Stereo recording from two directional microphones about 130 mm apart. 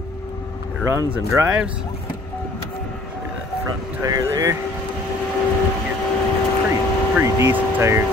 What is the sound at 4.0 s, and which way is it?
Speech, 25° right (ahead or behind).